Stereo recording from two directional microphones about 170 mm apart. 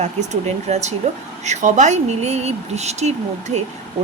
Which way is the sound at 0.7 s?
40° right (ahead or behind).